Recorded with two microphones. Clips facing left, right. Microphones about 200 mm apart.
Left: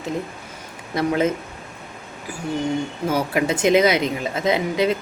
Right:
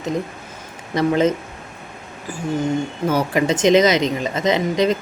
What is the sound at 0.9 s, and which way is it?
Speech, 10° left (ahead or behind).